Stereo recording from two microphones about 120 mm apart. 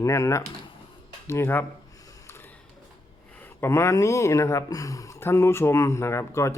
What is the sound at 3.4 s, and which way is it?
Speech, 20° left (ahead or behind).